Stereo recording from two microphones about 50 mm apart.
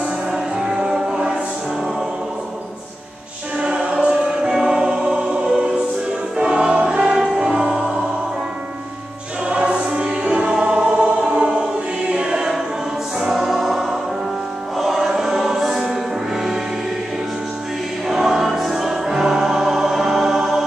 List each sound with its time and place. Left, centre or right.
0.3 s music: centre
3.5 s music: centre
9.5 s choir: right
13.2 s music: centre
14.8 s choir: centre
18.0 s music: centre